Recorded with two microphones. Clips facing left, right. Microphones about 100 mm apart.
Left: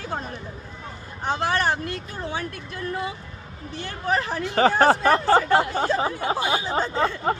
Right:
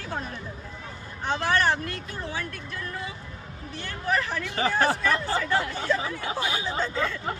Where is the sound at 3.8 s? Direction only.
30° left (ahead or behind).